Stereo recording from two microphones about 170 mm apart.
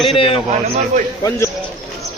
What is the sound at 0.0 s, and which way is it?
Speech, 35° left (ahead or behind).